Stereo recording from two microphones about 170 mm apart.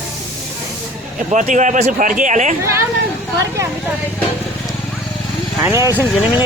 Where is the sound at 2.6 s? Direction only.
15° right (ahead or behind).